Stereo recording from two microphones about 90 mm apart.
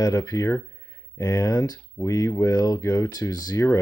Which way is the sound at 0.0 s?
40° left (ahead or behind).